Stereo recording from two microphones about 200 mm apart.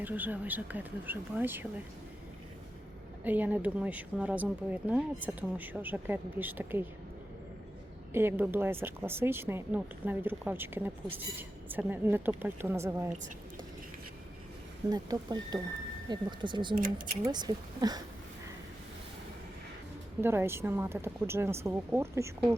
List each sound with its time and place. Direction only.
0.0 s speech: 10° right (ahead or behind)
3.2 s speech: 10° right (ahead or behind)
8.1 s speech: 10° right (ahead or behind)
14.8 s speech: 20° right (ahead or behind)
20.2 s speech: 10° right (ahead or behind)